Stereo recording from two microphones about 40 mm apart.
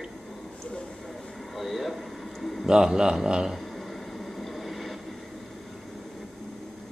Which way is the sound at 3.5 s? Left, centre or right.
Centre.